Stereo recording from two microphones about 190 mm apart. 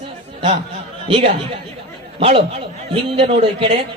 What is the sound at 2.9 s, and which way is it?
Speech, 30° right (ahead or behind).